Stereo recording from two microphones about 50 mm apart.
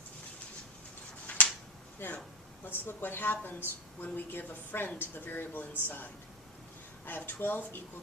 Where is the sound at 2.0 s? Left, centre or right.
Left.